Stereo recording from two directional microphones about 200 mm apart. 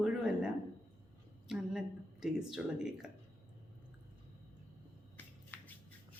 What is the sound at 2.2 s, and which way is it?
Speech, centre (ahead or behind).